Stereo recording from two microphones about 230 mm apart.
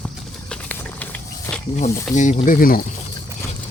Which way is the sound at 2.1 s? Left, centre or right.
Left.